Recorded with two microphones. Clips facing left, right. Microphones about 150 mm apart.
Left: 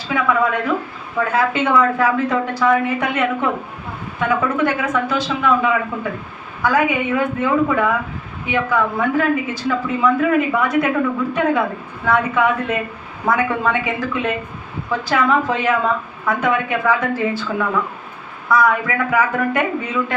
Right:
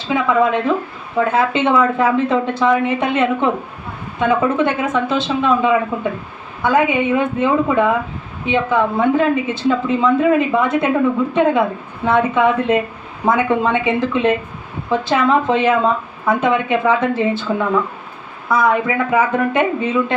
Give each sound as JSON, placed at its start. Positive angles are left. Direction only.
{"t": 0.1, "sound": "a woman's voice", "side_deg": -25}